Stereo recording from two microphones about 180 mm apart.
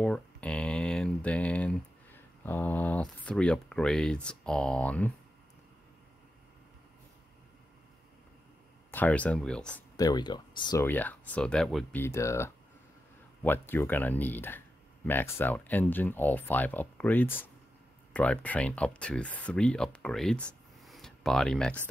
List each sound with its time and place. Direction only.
0.0 s a sound: 5° left (ahead or behind)
8.9 s speech: 10° left (ahead or behind)
9.9 s speech: 20° left (ahead or behind)
10.9 s speech: 10° left (ahead or behind)
12.0 s speech: 15° left (ahead or behind)